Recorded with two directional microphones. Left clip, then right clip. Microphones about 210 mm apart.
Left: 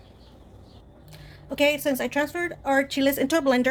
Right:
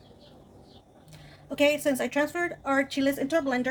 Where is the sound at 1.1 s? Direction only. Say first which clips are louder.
Left 3 dB; 20° left (ahead or behind).